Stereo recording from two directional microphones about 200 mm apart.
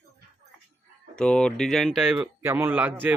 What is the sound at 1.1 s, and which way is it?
Speech, 5° left (ahead or behind).